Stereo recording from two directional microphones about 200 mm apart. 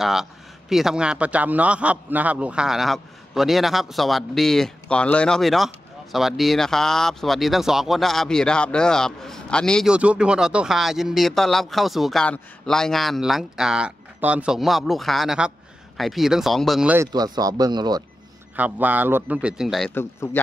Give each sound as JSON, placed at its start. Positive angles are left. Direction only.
{"t": 0.0, "sound": "speech", "side_deg": 0}
{"t": 17.1, "sound": "speech", "side_deg": -20}
{"t": 18.6, "sound": "a man's voice", "side_deg": -10}
{"t": 19.9, "sound": "a man's voice", "side_deg": 10}